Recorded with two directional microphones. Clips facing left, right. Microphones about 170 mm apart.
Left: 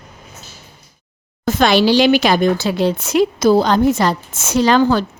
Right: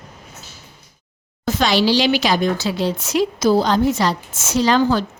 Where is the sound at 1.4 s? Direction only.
55° left (ahead or behind).